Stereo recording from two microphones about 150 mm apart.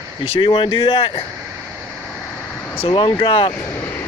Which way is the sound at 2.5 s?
10° left (ahead or behind).